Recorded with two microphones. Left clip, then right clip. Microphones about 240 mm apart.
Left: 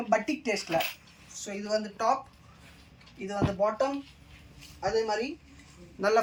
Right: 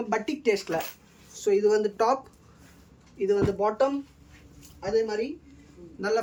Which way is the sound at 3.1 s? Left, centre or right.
Centre.